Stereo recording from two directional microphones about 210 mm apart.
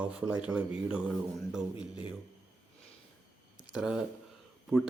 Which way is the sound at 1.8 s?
25° left (ahead or behind).